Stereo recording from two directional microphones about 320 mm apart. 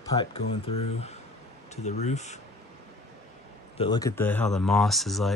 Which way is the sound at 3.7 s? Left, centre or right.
Centre.